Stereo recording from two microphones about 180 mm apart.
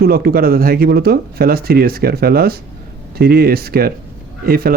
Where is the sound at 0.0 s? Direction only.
55° right (ahead or behind).